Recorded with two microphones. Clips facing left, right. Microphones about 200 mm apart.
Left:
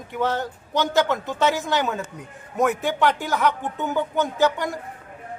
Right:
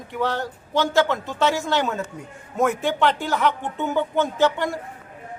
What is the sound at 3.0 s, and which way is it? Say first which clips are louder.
Speech: even; 15° left (ahead or behind).